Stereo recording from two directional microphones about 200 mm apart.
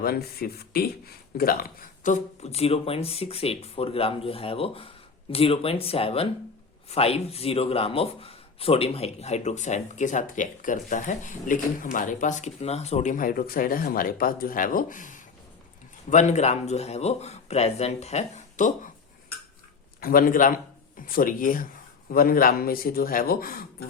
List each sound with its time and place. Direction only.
0.0 s speech: 50° left (ahead or behind)
20.0 s a man's voice: 45° left (ahead or behind)